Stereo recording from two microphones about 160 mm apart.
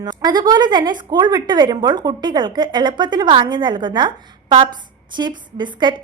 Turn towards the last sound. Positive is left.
turn(degrees=-30)  # may be behind; listen again after turning